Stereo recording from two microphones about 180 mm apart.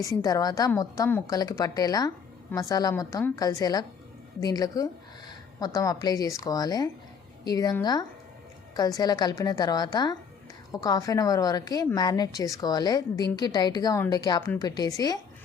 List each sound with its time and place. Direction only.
0.0 s a woman's voice: 20° left (ahead or behind)